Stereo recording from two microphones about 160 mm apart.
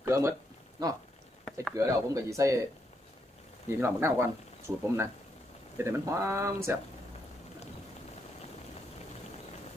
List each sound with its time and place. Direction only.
0.0 s a sound: 20° right (ahead or behind)
1.7 s speech: 20° right (ahead or behind)
3.7 s speech: 15° right (ahead or behind)